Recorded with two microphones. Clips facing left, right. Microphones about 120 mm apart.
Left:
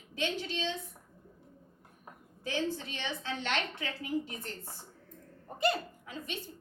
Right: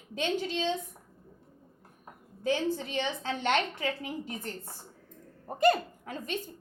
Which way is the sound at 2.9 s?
50° right (ahead or behind).